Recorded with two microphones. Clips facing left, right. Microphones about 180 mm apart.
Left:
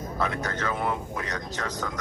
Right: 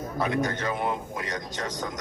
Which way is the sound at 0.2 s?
15° right (ahead or behind).